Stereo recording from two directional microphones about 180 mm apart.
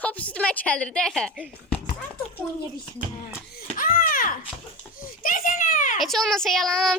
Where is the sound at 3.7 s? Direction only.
50° left (ahead or behind).